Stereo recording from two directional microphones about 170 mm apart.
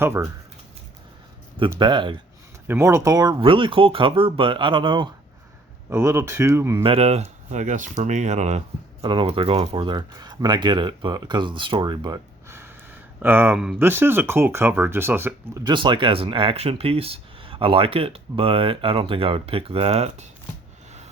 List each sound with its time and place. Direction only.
0.0 s speech: 15° right (ahead or behind)
1.8 s speech: 30° right (ahead or behind)
2.6 s speech: 15° right (ahead or behind)
5.9 s speech: 15° right (ahead or behind)
6.8 s speech: 35° right (ahead or behind)
12.5 s speech: 15° right (ahead or behind)
15.6 s speech: 30° right (ahead or behind)